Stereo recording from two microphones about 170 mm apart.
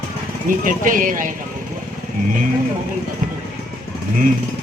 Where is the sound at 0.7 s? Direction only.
50° right (ahead or behind).